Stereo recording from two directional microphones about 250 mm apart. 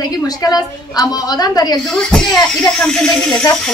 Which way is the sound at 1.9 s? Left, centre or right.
Centre.